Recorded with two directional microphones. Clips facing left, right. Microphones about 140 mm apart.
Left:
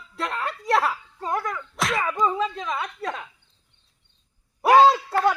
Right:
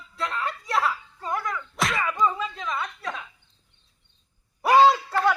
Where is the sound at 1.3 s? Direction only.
35° left (ahead or behind).